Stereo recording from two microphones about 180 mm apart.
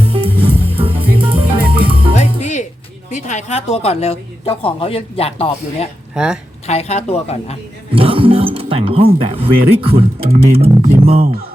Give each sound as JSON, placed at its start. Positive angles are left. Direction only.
{"t": 0.0, "sound": "music", "side_deg": -30}
{"t": 2.1, "sound": "music", "side_deg": 40}
{"t": 3.1, "sound": "a woman's voice", "side_deg": 45}
{"t": 6.1, "sound": "speech", "side_deg": -5}
{"t": 6.7, "sound": "a woman's voice", "side_deg": 35}
{"t": 7.9, "sound": "speech", "side_deg": -30}